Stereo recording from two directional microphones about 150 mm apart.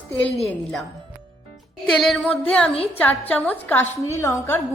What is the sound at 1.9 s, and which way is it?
Speech, centre (ahead or behind).